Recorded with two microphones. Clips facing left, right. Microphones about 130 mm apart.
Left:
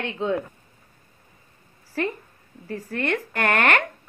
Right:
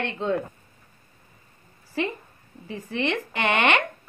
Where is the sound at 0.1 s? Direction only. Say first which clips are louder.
Left 3 dB; 5° left (ahead or behind).